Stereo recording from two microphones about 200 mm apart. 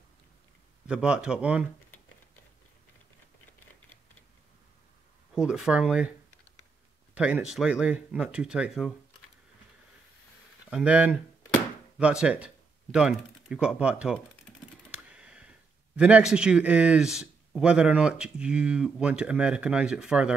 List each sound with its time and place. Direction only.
0.8 s speech: 5° right (ahead or behind)
5.3 s speech: 5° right (ahead or behind)
7.2 s speech: 5° right (ahead or behind)
10.7 s speech: 5° right (ahead or behind)
14.9 s typing: 5° right (ahead or behind)
16.0 s speech: 5° right (ahead or behind)